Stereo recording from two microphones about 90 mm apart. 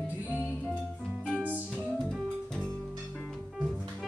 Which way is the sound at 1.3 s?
15° right (ahead or behind).